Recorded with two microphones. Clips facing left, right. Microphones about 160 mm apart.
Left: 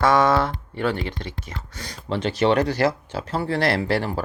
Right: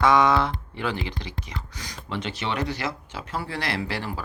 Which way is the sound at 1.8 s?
30° left (ahead or behind).